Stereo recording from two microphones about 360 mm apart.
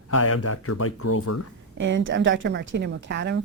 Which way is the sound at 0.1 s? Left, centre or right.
Left.